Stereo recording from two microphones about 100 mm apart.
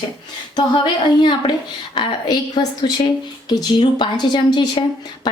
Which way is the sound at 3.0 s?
55° left (ahead or behind).